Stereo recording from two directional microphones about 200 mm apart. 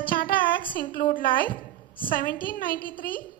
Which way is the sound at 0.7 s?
45° left (ahead or behind).